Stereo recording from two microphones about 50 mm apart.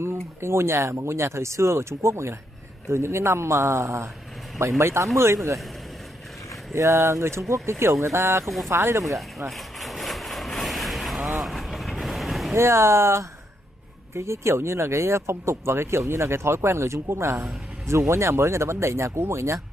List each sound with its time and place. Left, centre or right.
0.0 s speech: right
6.7 s speech: right
7.8 s speech: right
9.5 s cattle: centre
11.3 s vehicle: centre
12.5 s speech: right